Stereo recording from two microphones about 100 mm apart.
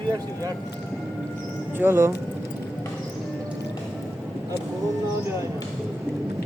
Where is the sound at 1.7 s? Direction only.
25° right (ahead or behind).